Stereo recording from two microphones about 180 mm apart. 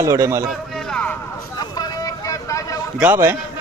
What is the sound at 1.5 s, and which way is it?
Vehicle, 20° left (ahead or behind).